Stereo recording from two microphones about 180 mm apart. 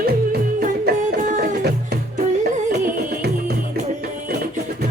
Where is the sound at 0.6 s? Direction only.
50° right (ahead or behind).